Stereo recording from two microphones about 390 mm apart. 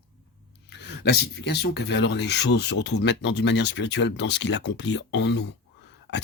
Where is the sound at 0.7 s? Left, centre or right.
Left.